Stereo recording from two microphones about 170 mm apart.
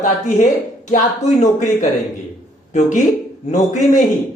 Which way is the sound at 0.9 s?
45° left (ahead or behind).